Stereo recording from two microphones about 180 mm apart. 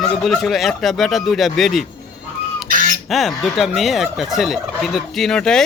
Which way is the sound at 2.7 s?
50° right (ahead or behind).